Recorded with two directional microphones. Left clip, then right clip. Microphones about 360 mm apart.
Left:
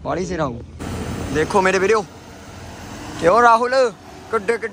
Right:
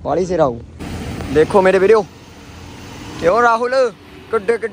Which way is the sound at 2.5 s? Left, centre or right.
Left.